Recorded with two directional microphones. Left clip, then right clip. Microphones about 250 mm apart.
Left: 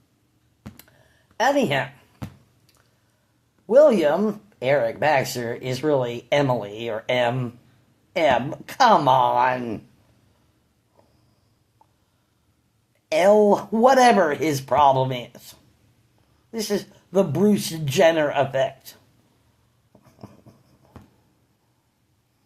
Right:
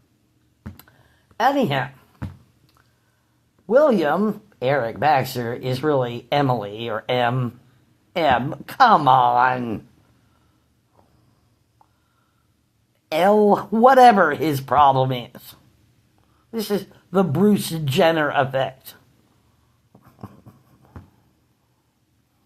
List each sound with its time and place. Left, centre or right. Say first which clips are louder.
1.4 s speech: right 1 dB; centre
3.7 s speech: left 1 dB; centre
13.1 s speech: even; centre
20.2 s dog: right 4 dB; centre